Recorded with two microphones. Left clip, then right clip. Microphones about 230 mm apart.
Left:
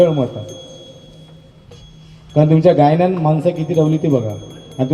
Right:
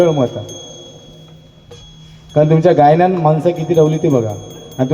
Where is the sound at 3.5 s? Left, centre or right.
Centre.